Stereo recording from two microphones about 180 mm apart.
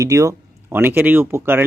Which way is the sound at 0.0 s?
20° right (ahead or behind).